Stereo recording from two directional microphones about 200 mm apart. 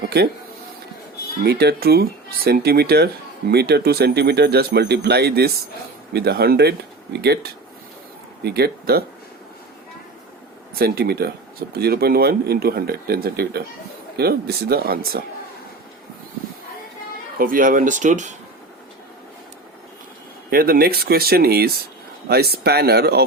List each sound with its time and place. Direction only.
1.5 s speech: 55° right (ahead or behind)
8.4 s speech: 50° right (ahead or behind)
10.8 s speech: 50° right (ahead or behind)
17.3 s speech: 45° right (ahead or behind)
20.5 s speech: 50° right (ahead or behind)